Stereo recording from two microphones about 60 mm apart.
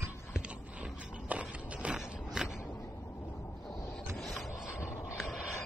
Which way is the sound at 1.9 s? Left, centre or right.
Centre.